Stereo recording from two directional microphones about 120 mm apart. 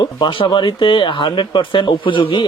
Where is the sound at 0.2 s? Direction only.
45° left (ahead or behind).